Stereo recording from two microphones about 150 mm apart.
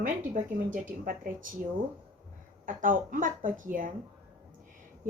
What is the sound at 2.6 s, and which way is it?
A woman's voice, 65° right (ahead or behind).